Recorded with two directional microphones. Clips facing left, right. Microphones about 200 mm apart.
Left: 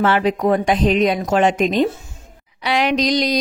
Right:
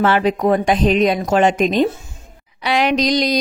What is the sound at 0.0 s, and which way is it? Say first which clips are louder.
Speech: right 1 dB; 40° right (ahead or behind).